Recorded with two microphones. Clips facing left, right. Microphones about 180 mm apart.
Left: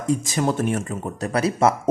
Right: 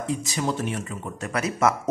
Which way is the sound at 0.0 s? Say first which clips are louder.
Left 5 dB; 45° left (ahead or behind).